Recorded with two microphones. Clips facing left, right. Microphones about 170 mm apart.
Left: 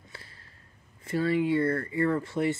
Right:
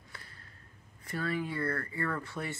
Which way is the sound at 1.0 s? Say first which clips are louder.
Left 9 dB; 25° left (ahead or behind).